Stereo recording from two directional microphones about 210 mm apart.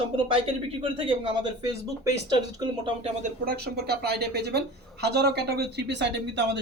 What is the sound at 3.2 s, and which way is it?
Speech, 45° right (ahead or behind).